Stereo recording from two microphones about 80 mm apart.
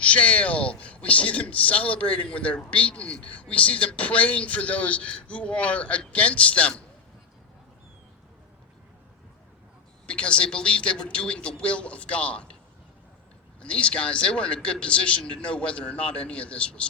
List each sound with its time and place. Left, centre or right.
0.0 s a man's voice: centre
10.1 s a man's voice: centre
13.6 s a man's voice: centre